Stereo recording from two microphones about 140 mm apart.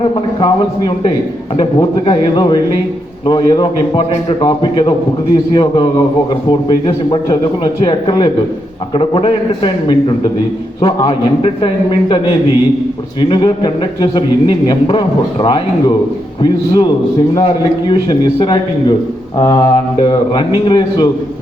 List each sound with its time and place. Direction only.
0.0 s a man's voice: 35° left (ahead or behind)
13.2 s a man's voice: 35° left (ahead or behind)